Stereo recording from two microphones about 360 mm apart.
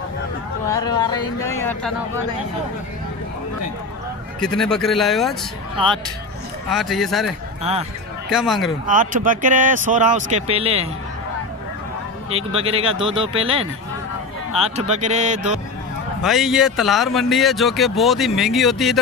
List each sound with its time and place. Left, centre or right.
0.7 s speech: centre
4.4 s speech: centre
6.7 s speech: centre
8.8 s speech: right
12.3 s speech: centre
16.2 s speech: centre